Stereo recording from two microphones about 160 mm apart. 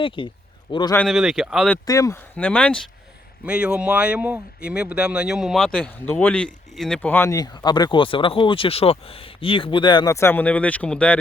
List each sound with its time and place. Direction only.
0.2 s a man's voice: 30° left (ahead or behind)
1.0 s speech: centre (ahead or behind)
1.9 s a man's voice: 20° left (ahead or behind)
2.3 s speech: 10° left (ahead or behind)
3.4 s speech: 5° right (ahead or behind)